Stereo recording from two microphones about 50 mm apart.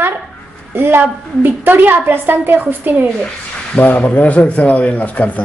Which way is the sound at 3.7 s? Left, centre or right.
Left.